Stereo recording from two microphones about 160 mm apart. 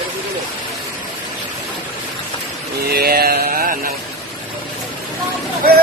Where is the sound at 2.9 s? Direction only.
75° right (ahead or behind).